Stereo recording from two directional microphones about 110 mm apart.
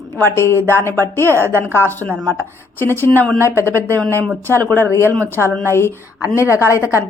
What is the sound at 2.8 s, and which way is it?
Speech, 20° left (ahead or behind).